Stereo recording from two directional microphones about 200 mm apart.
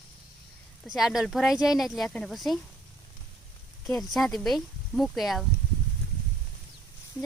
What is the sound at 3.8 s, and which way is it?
Speech, centre (ahead or behind).